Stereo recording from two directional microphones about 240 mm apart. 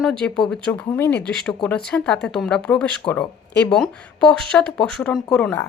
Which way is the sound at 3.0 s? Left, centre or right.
Centre.